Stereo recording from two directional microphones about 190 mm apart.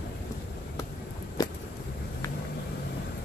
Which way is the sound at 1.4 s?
20° left (ahead or behind).